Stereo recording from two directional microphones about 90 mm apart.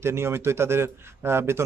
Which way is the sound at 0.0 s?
30° right (ahead or behind).